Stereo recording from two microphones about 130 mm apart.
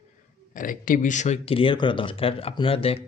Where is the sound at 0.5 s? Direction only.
90° left.